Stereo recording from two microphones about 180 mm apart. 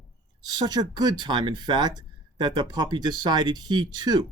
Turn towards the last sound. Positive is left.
turn(degrees=-20)  # may be behind; listen again after turning